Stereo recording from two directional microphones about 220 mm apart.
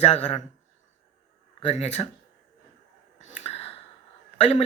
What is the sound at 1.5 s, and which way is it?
Speech, 30° left (ahead or behind).